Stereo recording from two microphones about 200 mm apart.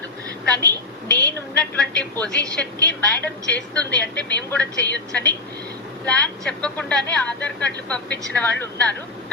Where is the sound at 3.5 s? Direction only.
5° left (ahead or behind).